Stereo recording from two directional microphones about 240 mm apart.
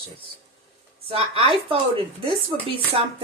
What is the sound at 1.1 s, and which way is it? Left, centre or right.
Speech, right.